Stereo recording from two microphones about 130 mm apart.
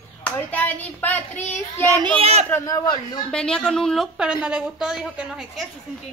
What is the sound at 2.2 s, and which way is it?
Speech, 50° right (ahead or behind).